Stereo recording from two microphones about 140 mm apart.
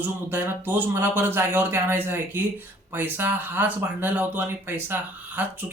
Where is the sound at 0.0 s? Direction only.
15° right (ahead or behind).